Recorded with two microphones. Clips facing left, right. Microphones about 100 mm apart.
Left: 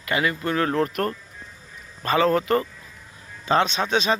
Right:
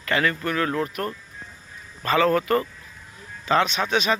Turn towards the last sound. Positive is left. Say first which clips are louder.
# left 1 dB
turn(degrees=25)  # may be behind; listen again after turning